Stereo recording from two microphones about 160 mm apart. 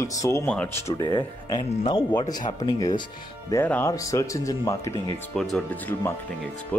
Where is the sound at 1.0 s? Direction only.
30° left (ahead or behind).